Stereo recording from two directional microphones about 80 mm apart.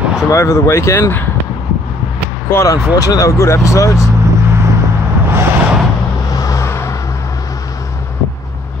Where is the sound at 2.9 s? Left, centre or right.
Left.